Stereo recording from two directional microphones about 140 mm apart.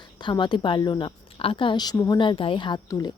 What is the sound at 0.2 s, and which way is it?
Speech, 35° left (ahead or behind).